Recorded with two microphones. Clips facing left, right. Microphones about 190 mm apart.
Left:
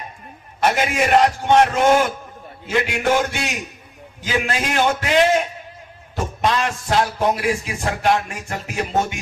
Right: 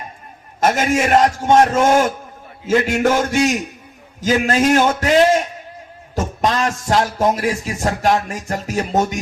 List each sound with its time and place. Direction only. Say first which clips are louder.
0.6 s a man's voice: right 3 dB; 45° right (ahead or behind)
6.4 s speech: right 1 dB; 40° right (ahead or behind)